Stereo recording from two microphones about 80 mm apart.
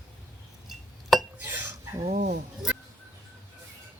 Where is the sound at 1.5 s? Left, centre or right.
Right.